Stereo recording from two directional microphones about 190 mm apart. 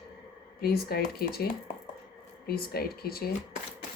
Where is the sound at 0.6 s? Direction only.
55° left (ahead or behind).